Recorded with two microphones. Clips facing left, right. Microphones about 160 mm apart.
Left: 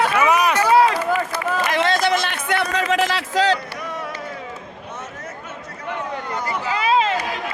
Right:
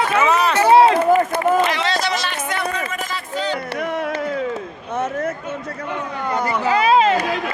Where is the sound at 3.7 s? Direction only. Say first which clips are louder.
Right 7 dB; 60° right (ahead or behind).